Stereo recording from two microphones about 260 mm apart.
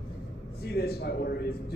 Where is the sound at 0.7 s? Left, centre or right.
Left.